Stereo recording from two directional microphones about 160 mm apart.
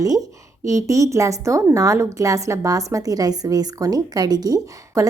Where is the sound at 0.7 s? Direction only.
20° right (ahead or behind).